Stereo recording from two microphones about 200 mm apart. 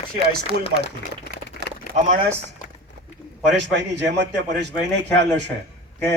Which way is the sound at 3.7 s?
60° right (ahead or behind).